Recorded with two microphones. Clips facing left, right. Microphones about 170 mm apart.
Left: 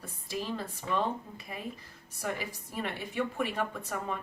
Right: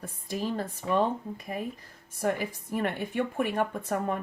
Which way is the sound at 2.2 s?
50° right (ahead or behind).